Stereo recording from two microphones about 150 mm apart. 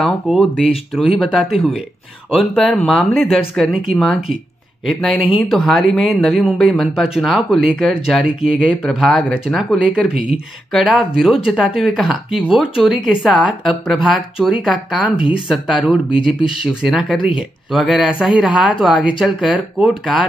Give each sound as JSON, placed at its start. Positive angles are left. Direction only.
{"t": 0.0, "sound": "speech", "side_deg": 0}
{"t": 2.6, "sound": "speech", "side_deg": 5}
{"t": 15.1, "sound": "speech", "side_deg": 35}
{"t": 15.4, "sound": "speech", "side_deg": -5}